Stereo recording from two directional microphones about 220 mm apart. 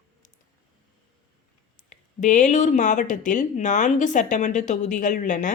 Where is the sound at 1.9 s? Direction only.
35° left (ahead or behind).